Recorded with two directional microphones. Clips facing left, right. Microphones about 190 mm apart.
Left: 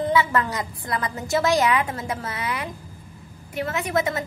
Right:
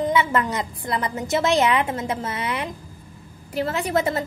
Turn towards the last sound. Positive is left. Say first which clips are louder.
# right 2 dB
turn(degrees=-30)  # may be behind; listen again after turning